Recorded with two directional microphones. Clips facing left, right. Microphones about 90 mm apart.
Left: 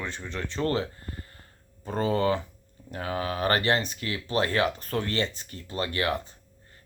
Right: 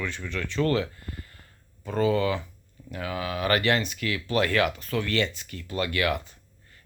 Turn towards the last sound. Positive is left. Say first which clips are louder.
# left 2 dB
turn(degrees=35)  # may be behind; listen again after turning